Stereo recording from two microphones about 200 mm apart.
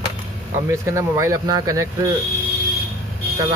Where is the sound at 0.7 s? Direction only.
15° right (ahead or behind).